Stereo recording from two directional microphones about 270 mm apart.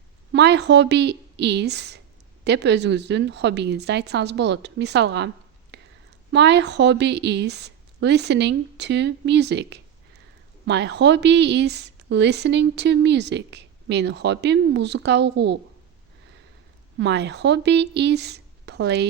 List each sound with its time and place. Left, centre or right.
0.3 s a woman's voice: right
5.7 s a sound: right
6.3 s a woman's voice: right
17.0 s a woman's voice: right